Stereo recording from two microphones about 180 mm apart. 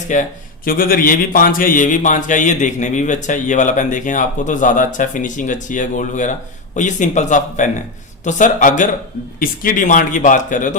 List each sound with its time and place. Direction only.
0.1 s a man's voice: 50° left (ahead or behind)